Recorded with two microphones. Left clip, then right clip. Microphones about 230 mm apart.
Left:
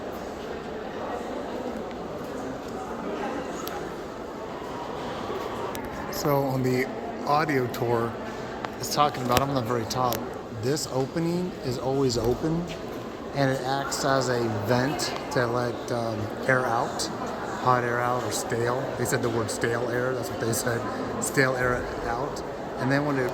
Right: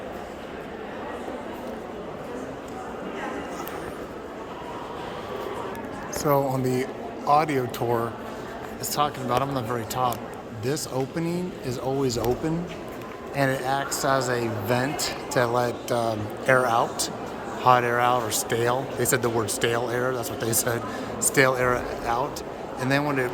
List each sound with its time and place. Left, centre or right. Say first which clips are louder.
6.2 s speech: right 2 dB; centre
13.4 s speech: right 2 dB; centre
16.0 s speech: right 2 dB; centre